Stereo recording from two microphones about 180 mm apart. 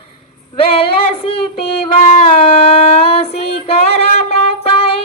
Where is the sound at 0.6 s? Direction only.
30° left (ahead or behind).